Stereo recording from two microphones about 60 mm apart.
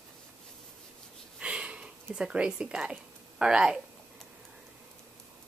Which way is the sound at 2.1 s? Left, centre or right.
Centre.